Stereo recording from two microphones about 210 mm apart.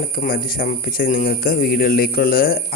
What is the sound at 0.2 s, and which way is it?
A man's voice, 45° left (ahead or behind).